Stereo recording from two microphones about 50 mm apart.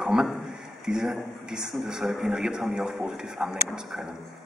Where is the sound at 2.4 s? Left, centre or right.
Centre.